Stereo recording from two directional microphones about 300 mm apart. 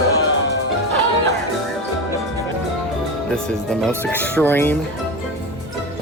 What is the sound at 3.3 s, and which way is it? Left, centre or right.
Speech, centre.